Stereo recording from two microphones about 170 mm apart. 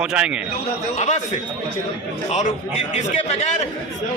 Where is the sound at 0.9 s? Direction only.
45° left (ahead or behind).